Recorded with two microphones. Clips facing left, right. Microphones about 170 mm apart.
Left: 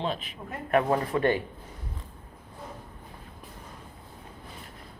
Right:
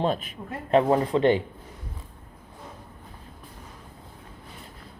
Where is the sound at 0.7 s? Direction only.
20° right (ahead or behind).